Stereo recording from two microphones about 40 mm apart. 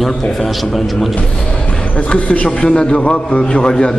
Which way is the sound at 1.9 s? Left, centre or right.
Left.